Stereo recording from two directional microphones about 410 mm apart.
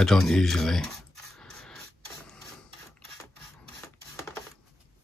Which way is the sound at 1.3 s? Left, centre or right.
Centre.